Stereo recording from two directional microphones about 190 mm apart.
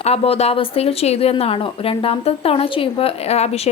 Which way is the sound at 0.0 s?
35° left (ahead or behind).